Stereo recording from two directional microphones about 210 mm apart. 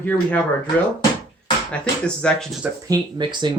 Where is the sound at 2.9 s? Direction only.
20° right (ahead or behind).